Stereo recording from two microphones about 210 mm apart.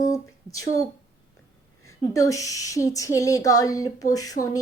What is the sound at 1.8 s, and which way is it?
Speech, 15° left (ahead or behind).